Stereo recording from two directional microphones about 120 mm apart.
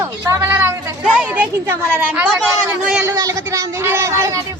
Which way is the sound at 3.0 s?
25° right (ahead or behind).